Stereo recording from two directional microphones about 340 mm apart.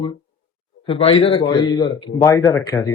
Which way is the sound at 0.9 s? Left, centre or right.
Centre.